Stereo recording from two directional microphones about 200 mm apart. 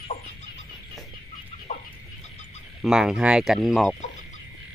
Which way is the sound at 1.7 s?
35° left (ahead or behind).